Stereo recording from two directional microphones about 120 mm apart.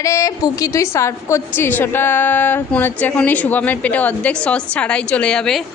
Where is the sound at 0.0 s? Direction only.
25° left (ahead or behind); by 5.7 s 5° left (ahead or behind).